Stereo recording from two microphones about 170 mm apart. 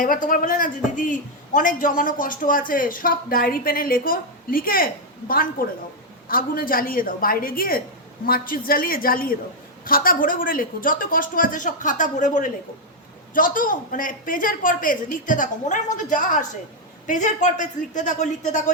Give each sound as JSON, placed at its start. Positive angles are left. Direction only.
{"t": 0.0, "sound": "a man's voice", "side_deg": 50}